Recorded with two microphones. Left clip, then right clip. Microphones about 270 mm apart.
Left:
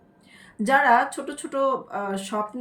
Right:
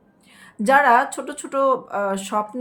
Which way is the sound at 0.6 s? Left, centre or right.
Centre.